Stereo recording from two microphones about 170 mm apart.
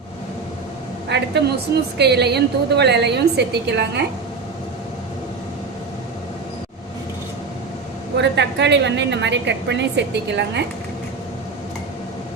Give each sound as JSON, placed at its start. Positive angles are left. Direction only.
{"t": 1.1, "sound": "a woman's voice", "side_deg": -80}
{"t": 8.1, "sound": "a woman's voice", "side_deg": -90}